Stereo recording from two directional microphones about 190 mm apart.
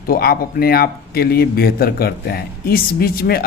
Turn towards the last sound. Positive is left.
turn(degrees=55)  # may be behind; listen again after turning